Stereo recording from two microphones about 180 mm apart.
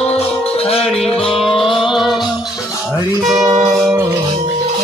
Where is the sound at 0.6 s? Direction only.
35° left (ahead or behind).